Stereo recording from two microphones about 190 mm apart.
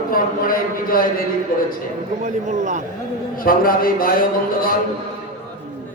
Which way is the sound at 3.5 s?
50° left (ahead or behind).